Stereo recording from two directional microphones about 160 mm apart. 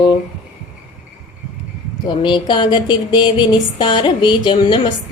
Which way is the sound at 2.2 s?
30° left (ahead or behind).